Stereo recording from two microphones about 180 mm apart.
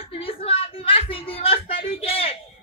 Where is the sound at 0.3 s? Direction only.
30° left (ahead or behind).